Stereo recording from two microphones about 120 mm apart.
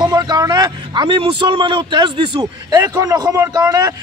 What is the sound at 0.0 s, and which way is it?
A man's voice, 35° right (ahead or behind).